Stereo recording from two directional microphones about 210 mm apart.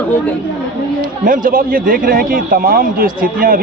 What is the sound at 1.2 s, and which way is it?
Speech, 40° right (ahead or behind).